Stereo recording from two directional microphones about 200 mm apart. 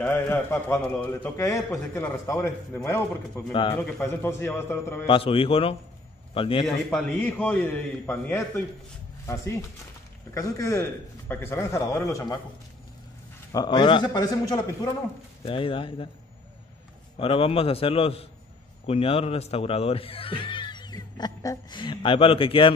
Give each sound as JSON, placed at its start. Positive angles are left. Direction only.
{"t": 0.0, "sound": "a man's voice", "side_deg": 10}
{"t": 5.0, "sound": "speech", "side_deg": 25}
{"t": 6.6, "sound": "a man's voice", "side_deg": 5}
{"t": 13.5, "sound": "speech", "side_deg": 20}
{"t": 17.2, "sound": "speech", "side_deg": 30}